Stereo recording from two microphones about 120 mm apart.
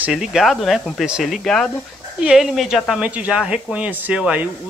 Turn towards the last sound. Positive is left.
turn(degrees=-10)  # may be behind; listen again after turning